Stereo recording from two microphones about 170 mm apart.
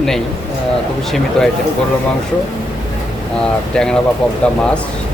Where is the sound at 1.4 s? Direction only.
5° left (ahead or behind).